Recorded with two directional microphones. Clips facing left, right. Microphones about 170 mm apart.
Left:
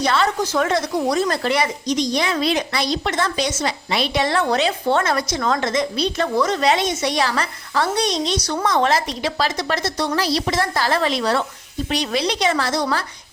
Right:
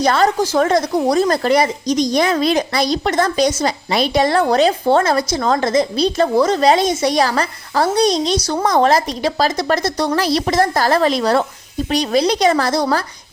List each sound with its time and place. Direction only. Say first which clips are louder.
0.0 s speech: right 5 dB; 40° right (ahead or behind)